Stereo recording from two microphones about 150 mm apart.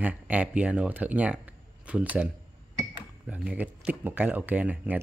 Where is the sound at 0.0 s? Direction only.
10° right (ahead or behind).